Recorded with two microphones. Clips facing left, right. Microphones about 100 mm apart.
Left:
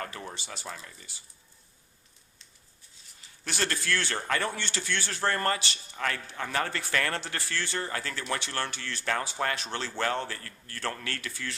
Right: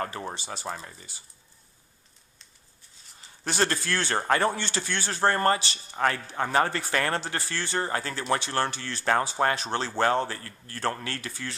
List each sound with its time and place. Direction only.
0.0 s speech: 30° right (ahead or behind)
3.4 s speech: 35° right (ahead or behind)